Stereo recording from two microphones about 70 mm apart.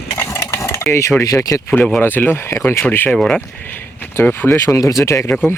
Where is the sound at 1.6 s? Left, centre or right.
Left.